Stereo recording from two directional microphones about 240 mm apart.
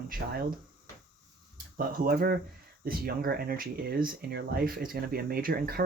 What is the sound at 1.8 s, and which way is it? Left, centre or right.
Speech, right.